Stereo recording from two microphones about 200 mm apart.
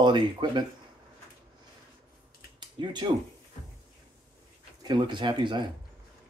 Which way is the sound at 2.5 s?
20° right (ahead or behind).